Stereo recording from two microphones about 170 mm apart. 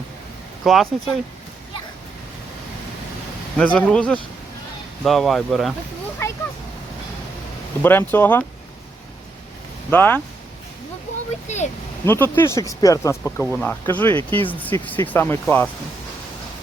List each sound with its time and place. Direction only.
0.6 s speech: centre (ahead or behind)
3.6 s speech: 5° left (ahead or behind)
6.2 s a sound: 15° left (ahead or behind)
7.8 s speech: 10° left (ahead or behind)
9.9 s speech: 10° left (ahead or behind)
11.4 s speech: 40° left (ahead or behind)
12.0 s speech: 15° left (ahead or behind)
14.2 s speech: 30° right (ahead or behind)
14.4 s speech: 10° left (ahead or behind)